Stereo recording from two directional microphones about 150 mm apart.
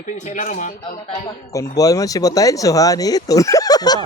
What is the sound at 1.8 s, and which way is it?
Speech, 25° left (ahead or behind).